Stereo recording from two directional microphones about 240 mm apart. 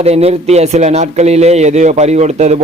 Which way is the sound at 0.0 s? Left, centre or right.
Right.